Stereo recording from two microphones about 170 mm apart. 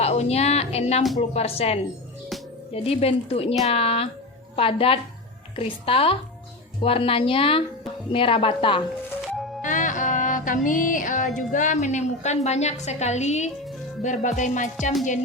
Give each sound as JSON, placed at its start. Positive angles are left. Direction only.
{"t": 0.0, "sound": "a woman's voice", "side_deg": 40}
{"t": 9.6, "sound": "music", "side_deg": 50}
{"t": 12.8, "sound": "a woman's voice", "side_deg": 40}
{"t": 14.0, "sound": "music", "side_deg": 45}